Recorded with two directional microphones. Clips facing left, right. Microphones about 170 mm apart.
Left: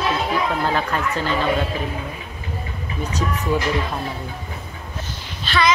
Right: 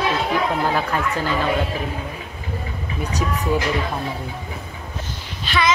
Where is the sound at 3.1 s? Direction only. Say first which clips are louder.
Right 1 dB; 35° right (ahead or behind).